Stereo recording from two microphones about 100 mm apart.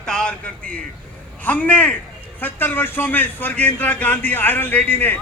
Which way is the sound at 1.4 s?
15° left (ahead or behind).